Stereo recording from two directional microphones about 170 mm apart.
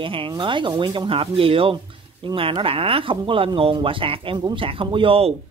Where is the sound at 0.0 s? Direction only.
30° right (ahead or behind).